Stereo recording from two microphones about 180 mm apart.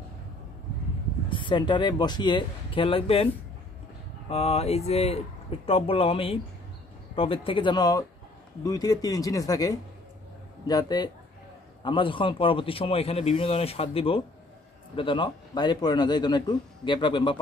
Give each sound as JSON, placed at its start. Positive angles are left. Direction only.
{"t": 1.3, "sound": "a man's voice", "side_deg": 25}
{"t": 4.3, "sound": "a man's voice", "side_deg": 35}